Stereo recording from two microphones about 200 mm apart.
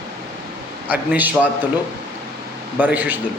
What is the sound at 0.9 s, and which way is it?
Speech, 10° right (ahead or behind).